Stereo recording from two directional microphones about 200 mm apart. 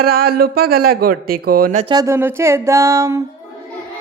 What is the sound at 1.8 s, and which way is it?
Speech, 20° right (ahead or behind).